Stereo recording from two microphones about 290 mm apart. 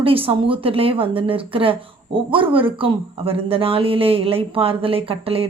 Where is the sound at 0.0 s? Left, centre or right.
Centre.